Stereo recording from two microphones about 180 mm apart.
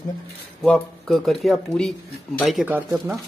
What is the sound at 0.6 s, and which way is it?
Speech, 5° left (ahead or behind).